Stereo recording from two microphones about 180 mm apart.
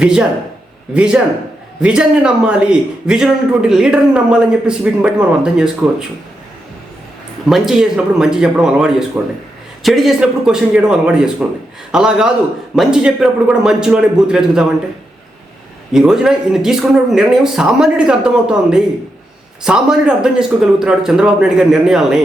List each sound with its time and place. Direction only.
0.0 s a man's voice: 5° right (ahead or behind)
7.4 s a man's voice: centre (ahead or behind)
15.9 s a man's voice: 5° right (ahead or behind)
19.6 s a man's voice: 5° right (ahead or behind)